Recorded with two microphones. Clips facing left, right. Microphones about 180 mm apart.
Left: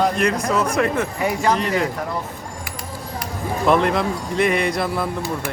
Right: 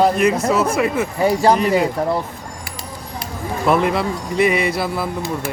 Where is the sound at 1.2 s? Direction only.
35° right (ahead or behind).